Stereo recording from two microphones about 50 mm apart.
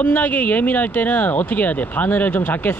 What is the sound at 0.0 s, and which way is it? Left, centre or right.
Speech, left.